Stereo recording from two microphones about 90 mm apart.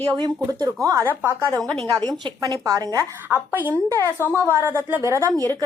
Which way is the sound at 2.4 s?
45° right (ahead or behind).